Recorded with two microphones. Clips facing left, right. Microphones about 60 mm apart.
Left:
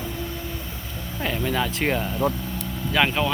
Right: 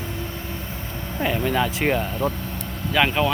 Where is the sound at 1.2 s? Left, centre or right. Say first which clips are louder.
Right 3 dB; centre.